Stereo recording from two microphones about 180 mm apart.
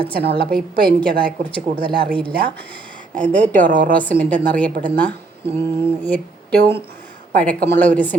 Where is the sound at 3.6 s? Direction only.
50° right (ahead or behind).